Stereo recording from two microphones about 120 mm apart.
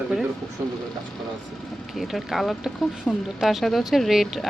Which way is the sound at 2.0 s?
Centre (ahead or behind).